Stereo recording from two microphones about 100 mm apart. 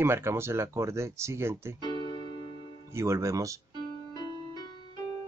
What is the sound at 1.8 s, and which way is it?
Music, 50° left (ahead or behind).